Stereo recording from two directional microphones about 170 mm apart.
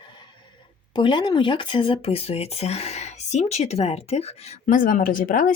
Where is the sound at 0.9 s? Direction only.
25° left (ahead or behind).